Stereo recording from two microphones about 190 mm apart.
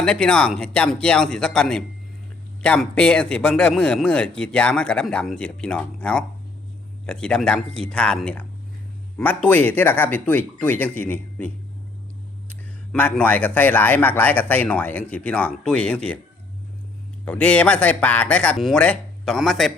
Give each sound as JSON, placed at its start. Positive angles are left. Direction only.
{"t": 0.0, "sound": "a man's voice", "side_deg": 5}
{"t": 12.9, "sound": "speech", "side_deg": 5}
{"t": 17.2, "sound": "speech", "side_deg": 5}